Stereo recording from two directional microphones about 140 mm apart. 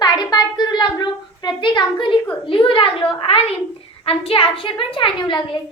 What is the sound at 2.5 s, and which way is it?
A child's voice, 40° left (ahead or behind).